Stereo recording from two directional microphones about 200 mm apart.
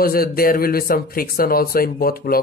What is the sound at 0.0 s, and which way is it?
Speech, 50° left (ahead or behind).